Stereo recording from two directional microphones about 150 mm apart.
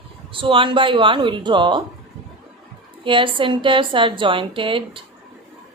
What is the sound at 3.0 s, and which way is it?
A woman's voice, 35° right (ahead or behind).